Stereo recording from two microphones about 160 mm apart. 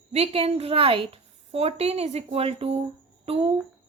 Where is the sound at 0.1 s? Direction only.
40° right (ahead or behind).